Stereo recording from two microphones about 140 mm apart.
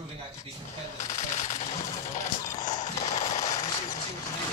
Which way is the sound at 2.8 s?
55° left (ahead or behind).